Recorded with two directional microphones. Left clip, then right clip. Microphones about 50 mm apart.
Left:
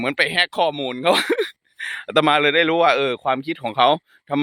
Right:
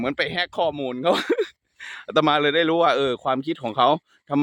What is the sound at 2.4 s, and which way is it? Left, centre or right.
Speech, right.